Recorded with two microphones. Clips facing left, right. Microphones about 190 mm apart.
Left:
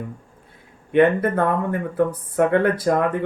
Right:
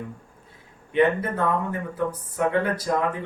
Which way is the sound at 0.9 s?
55° left (ahead or behind).